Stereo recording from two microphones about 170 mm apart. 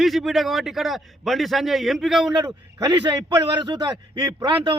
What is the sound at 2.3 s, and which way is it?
A man's voice, 25° right (ahead or behind).